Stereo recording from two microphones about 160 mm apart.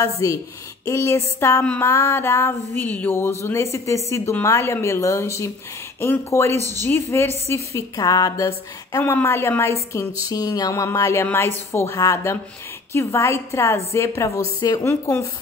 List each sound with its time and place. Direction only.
0.2 s a sound: 20° left (ahead or behind)
0.8 s a woman's voice: 20° left (ahead or behind)
6.6 s speech: 20° right (ahead or behind)
6.9 s a woman's voice: 15° left (ahead or behind)
10.3 s a sound: 25° left (ahead or behind)
11.2 s a woman's voice: 15° left (ahead or behind)